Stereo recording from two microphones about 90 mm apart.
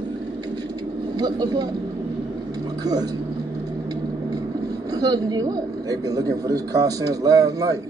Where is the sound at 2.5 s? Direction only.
50° right (ahead or behind).